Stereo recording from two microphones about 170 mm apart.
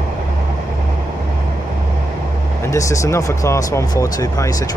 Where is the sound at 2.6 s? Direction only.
20° left (ahead or behind).